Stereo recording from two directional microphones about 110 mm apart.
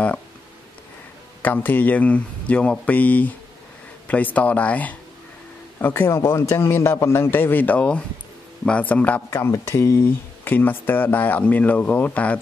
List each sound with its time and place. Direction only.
1.4 s a man's voice: 15° left (ahead or behind)
9.3 s a man's voice: 25° left (ahead or behind)
10.4 s speech: 20° left (ahead or behind)